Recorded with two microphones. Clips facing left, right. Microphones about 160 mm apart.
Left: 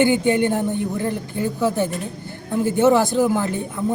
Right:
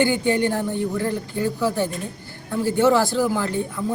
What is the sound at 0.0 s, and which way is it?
Speech, 20° left (ahead or behind).